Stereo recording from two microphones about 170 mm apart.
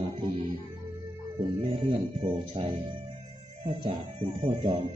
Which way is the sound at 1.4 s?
30° right (ahead or behind).